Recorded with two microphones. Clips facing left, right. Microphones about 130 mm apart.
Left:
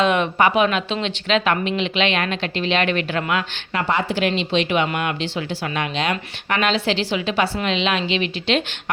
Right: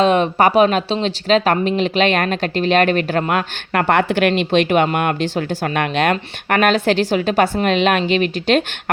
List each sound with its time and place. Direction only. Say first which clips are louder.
0.0 s speech: right 4 dB; 35° right (ahead or behind)